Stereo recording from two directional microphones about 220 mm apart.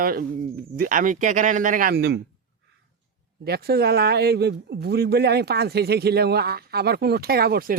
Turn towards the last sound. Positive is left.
turn(degrees=-45)  # may be behind; listen again after turning